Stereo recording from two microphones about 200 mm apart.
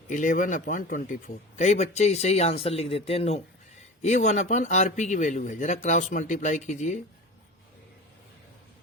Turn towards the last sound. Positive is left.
turn(degrees=35)  # may be behind; listen again after turning